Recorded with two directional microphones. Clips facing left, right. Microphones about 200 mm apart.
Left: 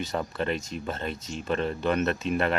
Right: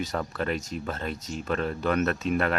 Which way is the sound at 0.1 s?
10° left (ahead or behind).